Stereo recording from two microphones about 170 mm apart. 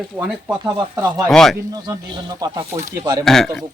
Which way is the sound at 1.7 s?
25° right (ahead or behind).